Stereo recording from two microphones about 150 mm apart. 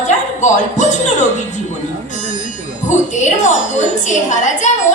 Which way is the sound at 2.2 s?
55° left (ahead or behind).